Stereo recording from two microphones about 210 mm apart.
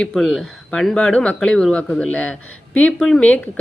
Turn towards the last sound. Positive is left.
turn(degrees=5)  # may be behind; listen again after turning